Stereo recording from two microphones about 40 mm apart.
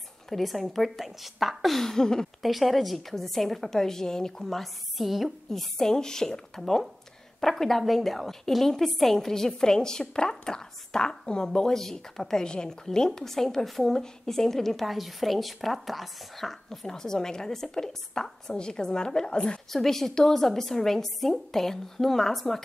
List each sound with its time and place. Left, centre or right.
0.3 s a woman's voice: centre
1.9 s a woman's voice: centre
2.4 s a woman's voice: centre
5.5 s a woman's voice: centre
19.7 s a woman's voice: centre